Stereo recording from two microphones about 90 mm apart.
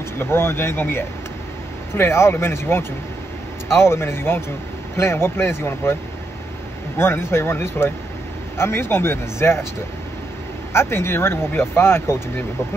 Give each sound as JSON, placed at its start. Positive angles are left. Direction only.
{"t": 0.2, "sound": "speech", "side_deg": 25}
{"t": 7.0, "sound": "speech", "side_deg": 30}
{"t": 10.7, "sound": "speech", "side_deg": 30}